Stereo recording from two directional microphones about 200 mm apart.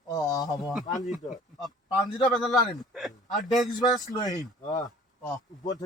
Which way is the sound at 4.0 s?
20° left (ahead or behind).